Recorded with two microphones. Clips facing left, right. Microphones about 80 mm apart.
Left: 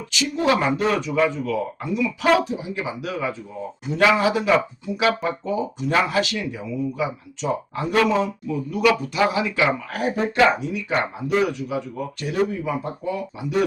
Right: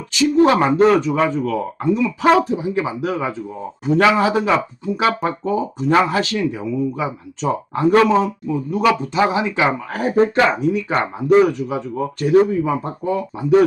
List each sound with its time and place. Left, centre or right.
0.1 s speech: right